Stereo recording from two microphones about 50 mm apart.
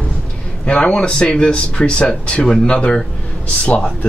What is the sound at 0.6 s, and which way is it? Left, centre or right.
Speech, centre.